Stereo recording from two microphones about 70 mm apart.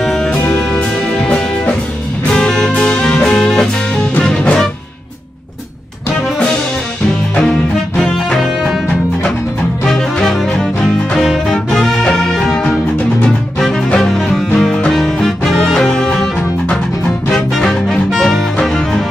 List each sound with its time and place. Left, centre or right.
0.0 s music: centre
0.3 s music: centre
8.0 s music: centre
9.8 s music: centre
13.8 s music: centre
17.3 s music: centre